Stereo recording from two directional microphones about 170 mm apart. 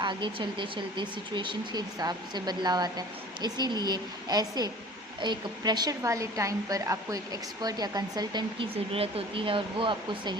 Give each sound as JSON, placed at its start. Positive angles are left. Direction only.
{"t": 0.0, "sound": "speech", "side_deg": -30}